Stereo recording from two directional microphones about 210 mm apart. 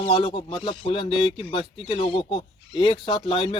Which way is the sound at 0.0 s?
25° left (ahead or behind).